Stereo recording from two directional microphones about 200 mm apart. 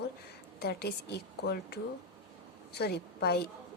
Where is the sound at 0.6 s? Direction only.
50° left (ahead or behind).